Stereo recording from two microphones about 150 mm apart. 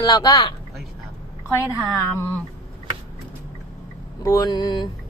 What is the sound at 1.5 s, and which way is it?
Speech, 20° left (ahead or behind).